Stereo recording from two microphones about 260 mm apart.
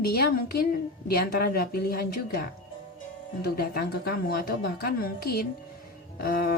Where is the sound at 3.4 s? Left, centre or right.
Left.